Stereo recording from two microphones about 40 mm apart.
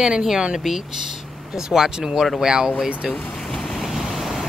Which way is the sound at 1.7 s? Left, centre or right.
Centre.